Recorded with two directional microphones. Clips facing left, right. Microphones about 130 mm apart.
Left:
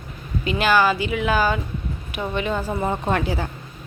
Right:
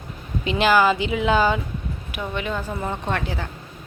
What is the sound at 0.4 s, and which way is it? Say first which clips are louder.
Speech: right 1 dB; 15° right (ahead or behind).